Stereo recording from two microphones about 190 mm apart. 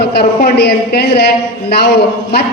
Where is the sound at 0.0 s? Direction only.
55° left (ahead or behind).